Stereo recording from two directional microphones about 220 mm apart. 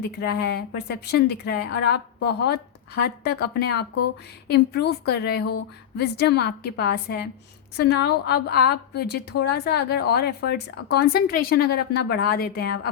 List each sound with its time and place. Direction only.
0.2 s a woman's voice: 50° left (ahead or behind)